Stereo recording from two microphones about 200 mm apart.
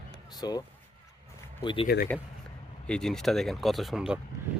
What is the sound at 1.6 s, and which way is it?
Speech, 25° left (ahead or behind).